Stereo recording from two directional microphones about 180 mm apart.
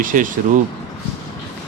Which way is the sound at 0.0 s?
50° right (ahead or behind).